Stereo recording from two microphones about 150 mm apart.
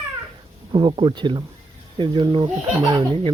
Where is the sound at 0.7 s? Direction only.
35° right (ahead or behind).